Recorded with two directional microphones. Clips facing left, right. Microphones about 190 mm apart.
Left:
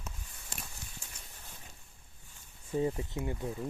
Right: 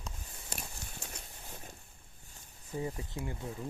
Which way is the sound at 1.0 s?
70° right (ahead or behind).